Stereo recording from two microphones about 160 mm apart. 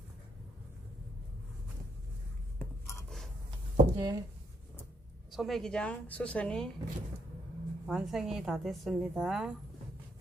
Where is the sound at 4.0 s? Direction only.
25° right (ahead or behind).